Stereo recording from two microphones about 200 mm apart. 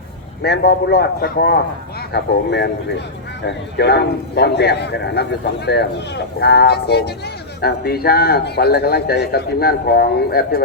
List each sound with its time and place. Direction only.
0.4 s a man's voice: 55° left (ahead or behind)